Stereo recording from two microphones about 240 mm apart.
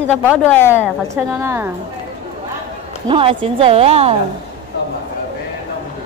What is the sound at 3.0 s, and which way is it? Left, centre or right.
Speech, right.